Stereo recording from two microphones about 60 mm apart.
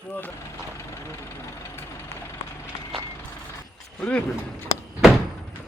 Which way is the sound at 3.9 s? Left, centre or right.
Centre.